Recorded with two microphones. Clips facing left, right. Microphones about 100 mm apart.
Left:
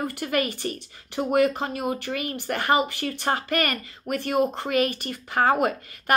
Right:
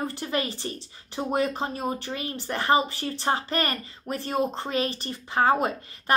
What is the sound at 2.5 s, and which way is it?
Speech, 30° right (ahead or behind).